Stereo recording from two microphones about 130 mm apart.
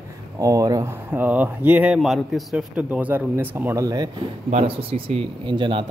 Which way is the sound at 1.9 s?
Centre (ahead or behind).